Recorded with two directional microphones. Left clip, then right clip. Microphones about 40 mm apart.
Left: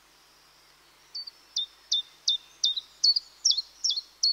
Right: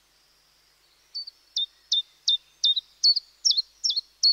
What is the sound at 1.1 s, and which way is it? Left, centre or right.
Camera, right.